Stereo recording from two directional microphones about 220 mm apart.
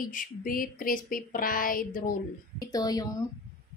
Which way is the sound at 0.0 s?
40° left (ahead or behind).